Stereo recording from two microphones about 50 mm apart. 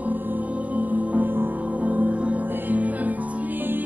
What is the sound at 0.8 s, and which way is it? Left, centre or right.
Music, right.